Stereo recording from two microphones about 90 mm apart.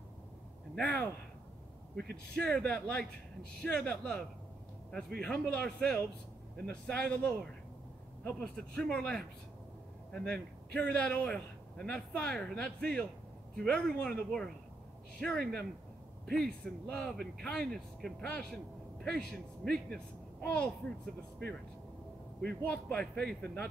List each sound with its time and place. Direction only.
0.7 s a man's voice: 15° left (ahead or behind)